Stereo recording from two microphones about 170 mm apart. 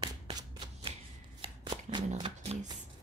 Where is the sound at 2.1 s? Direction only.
35° right (ahead or behind).